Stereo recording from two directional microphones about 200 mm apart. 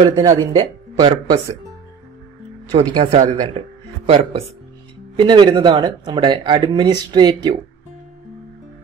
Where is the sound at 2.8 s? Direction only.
30° right (ahead or behind).